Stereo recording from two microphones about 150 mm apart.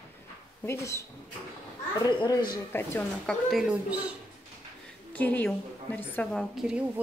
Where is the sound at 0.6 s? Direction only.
20° left (ahead or behind).